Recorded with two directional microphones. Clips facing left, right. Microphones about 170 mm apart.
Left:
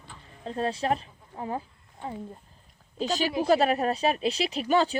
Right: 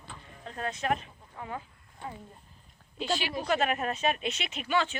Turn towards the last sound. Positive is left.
turn(degrees=35)  # may be behind; listen again after turning